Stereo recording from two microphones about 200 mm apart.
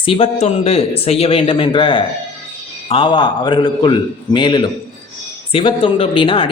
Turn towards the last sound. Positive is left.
turn(degrees=25)  # may be behind; listen again after turning